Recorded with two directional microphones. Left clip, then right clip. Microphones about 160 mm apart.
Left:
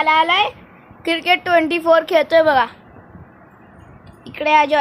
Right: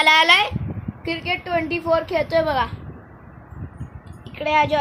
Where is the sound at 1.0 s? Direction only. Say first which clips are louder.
Left 8 dB; 45° left (ahead or behind).